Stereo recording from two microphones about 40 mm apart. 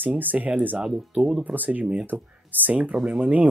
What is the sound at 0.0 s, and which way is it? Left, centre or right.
Speech, right.